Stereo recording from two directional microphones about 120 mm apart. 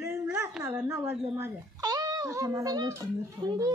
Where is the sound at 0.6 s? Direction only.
25° right (ahead or behind).